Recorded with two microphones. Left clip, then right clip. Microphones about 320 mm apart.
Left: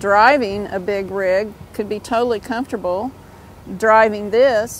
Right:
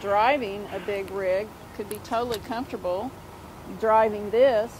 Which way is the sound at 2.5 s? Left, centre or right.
Left.